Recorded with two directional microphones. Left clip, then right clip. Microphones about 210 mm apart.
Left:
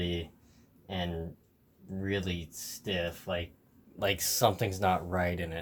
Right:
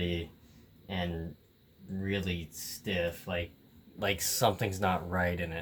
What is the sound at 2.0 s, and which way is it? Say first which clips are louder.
Speech: left 1 dB; 15° left (ahead or behind).